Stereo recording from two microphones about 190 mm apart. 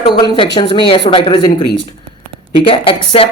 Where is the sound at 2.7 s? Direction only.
25° left (ahead or behind).